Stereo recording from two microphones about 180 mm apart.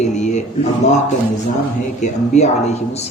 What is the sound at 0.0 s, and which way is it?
Speech, 40° left (ahead or behind).